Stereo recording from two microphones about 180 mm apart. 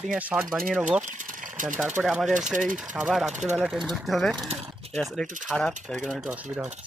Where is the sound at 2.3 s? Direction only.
45° right (ahead or behind).